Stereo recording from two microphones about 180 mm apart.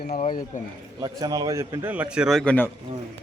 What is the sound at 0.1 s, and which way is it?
Speech, 45° left (ahead or behind).